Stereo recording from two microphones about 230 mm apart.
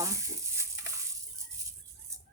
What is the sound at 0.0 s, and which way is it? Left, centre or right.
Fowl, centre.